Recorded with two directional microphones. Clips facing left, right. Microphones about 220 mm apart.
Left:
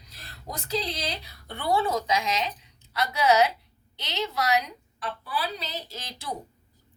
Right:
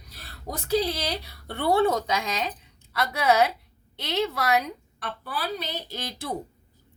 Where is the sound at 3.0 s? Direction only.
55° right (ahead or behind).